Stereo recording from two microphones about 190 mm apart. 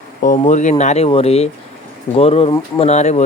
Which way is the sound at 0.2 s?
40° left (ahead or behind).